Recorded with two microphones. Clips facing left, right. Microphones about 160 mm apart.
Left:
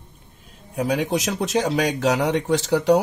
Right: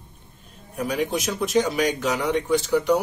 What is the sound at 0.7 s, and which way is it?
Speech, 85° left.